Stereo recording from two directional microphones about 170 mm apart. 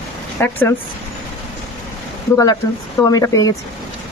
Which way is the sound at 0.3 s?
10° left (ahead or behind).